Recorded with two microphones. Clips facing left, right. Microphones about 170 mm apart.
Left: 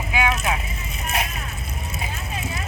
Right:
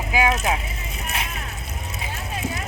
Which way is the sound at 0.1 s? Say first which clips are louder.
Right 2 dB; 40° right (ahead or behind).